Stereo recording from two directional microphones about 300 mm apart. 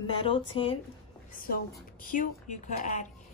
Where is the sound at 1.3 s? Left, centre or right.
Left.